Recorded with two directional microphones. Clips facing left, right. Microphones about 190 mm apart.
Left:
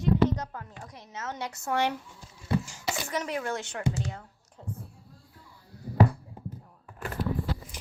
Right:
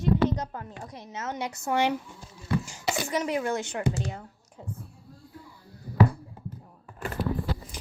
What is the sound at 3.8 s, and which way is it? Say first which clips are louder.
Speech: left 1 dB; 55° right (ahead or behind).